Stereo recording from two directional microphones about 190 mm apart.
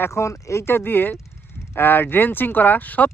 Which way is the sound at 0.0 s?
15° left (ahead or behind).